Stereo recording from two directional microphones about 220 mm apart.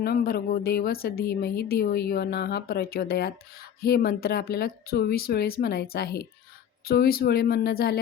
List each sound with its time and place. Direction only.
0.0 s a woman's voice: 45° left (ahead or behind)